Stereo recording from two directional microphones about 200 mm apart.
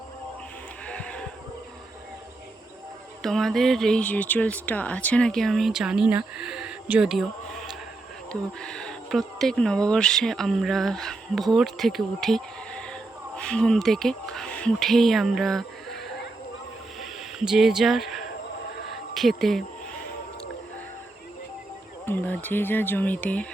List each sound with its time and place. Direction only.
0.9 s sheep: 5° left (ahead or behind)
3.2 s speech: centre (ahead or behind)
17.0 s a sound: centre (ahead or behind)
19.1 s speech: centre (ahead or behind)
22.0 s speech: 10° left (ahead or behind)